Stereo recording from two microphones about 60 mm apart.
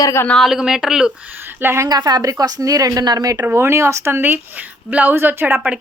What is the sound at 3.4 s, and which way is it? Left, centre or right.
Speech, right.